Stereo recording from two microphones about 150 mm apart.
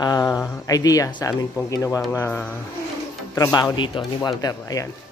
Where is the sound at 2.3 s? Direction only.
5° left (ahead or behind).